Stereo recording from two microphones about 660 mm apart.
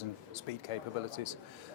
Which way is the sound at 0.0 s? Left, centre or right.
Left.